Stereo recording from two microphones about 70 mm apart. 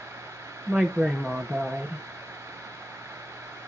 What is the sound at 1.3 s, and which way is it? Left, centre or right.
Speech, centre.